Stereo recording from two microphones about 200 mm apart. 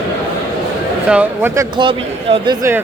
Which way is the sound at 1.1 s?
10° right (ahead or behind).